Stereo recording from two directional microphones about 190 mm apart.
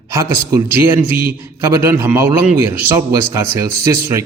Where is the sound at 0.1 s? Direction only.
15° right (ahead or behind).